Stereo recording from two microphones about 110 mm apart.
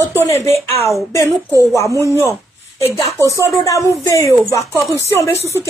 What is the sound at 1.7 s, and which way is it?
A man's voice, 25° left (ahead or behind).